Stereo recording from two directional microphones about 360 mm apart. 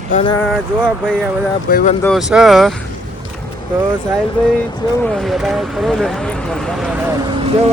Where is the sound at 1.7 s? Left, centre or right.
Left.